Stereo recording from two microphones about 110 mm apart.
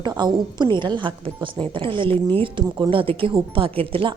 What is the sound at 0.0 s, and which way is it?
A woman's voice, 40° right (ahead or behind).